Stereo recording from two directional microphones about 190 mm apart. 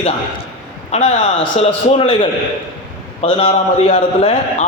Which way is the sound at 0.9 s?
35° left (ahead or behind).